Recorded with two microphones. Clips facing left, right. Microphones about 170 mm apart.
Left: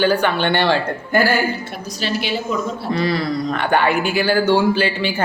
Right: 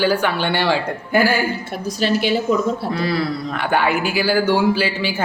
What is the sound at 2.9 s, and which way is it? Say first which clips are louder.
Speech: left 1 dB; 5° right (ahead or behind).